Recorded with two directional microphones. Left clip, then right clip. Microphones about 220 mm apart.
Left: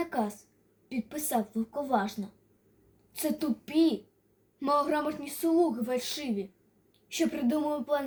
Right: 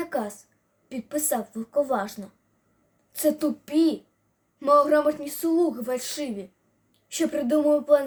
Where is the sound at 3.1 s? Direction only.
15° right (ahead or behind).